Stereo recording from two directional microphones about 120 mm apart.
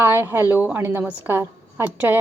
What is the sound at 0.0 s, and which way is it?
Speech, 20° right (ahead or behind).